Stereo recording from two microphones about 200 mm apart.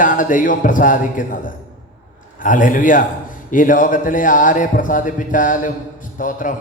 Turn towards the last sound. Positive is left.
turn(degrees=40)  # may be behind; listen again after turning